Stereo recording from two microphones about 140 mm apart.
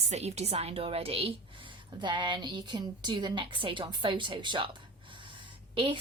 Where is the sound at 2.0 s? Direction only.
35° right (ahead or behind).